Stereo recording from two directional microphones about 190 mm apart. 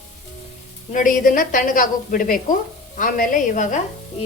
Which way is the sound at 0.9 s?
45° left (ahead or behind).